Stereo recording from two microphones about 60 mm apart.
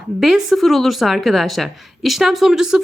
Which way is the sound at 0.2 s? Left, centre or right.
Centre.